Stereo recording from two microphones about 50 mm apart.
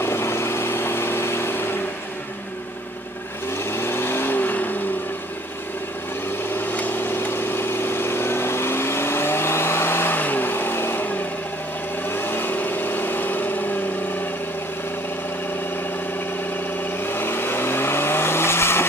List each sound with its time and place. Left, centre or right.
0.0 s vehicle: left
3.7 s vehicle: left
6.5 s vehicle: left
10.1 s vehicle: left
12.1 s vehicle: left
17.0 s vehicle: left